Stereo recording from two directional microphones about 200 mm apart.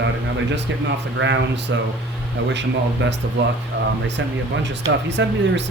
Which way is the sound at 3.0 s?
60° right (ahead or behind).